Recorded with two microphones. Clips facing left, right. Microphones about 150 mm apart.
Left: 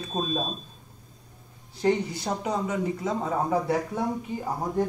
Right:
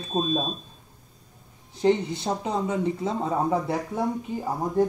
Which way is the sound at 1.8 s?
20° right (ahead or behind).